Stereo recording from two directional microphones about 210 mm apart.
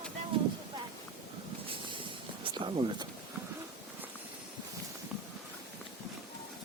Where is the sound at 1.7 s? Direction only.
25° right (ahead or behind).